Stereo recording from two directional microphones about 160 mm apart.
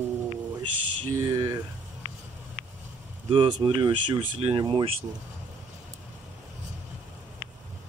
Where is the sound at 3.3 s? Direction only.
30° right (ahead or behind).